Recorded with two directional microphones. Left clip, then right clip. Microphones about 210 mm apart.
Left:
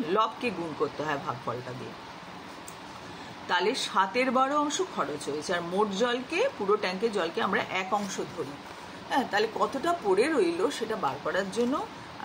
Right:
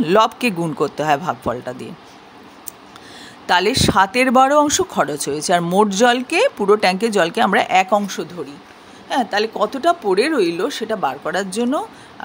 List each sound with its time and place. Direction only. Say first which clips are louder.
0.0 s speech: right 12 dB; 55° right (ahead or behind)
3.4 s speech: right 12 dB; 55° right (ahead or behind)